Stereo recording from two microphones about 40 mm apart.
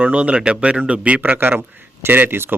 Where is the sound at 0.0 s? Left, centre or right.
Right.